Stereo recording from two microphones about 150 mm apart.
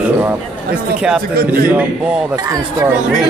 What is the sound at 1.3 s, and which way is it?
Speech, 80° right.